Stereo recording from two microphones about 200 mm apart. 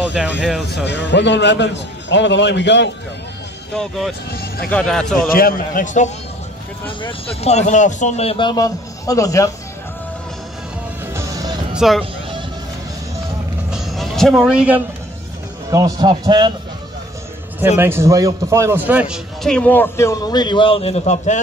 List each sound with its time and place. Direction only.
0.2 s speech: centre (ahead or behind)
0.8 s a man's voice: 60° left (ahead or behind)
3.7 s speech: centre (ahead or behind)
4.3 s speech: 50° left (ahead or behind)
4.6 s speech: 5° left (ahead or behind)
5.3 s a man's voice: 45° left (ahead or behind)
7.0 s speech: 25° left (ahead or behind)
11.1 s music: 20° right (ahead or behind)
11.7 s music: centre (ahead or behind)
13.7 s music: centre (ahead or behind)
15.7 s a man's voice: 20° right (ahead or behind)
17.7 s a man's voice: 10° right (ahead or behind); by 21.4 s 35° left (ahead or behind)